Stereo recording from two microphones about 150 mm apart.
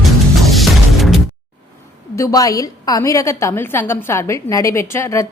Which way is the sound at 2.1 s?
20° left (ahead or behind).